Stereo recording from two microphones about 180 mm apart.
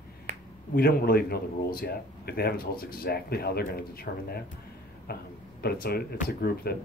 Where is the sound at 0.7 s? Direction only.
60° left (ahead or behind).